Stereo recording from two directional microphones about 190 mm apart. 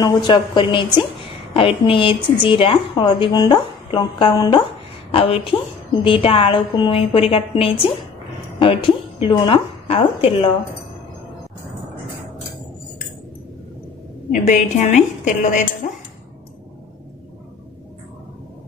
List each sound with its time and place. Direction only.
0.0 s a woman's voice: 25° left (ahead or behind)
14.3 s a woman's voice: 40° left (ahead or behind)